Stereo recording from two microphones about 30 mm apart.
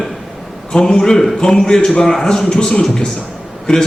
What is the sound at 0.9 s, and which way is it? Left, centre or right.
A man's voice, centre.